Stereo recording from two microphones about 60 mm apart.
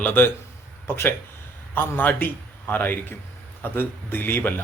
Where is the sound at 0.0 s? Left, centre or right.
Left.